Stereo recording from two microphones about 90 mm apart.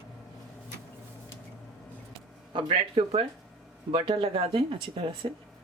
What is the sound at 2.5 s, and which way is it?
Speech, 80° right.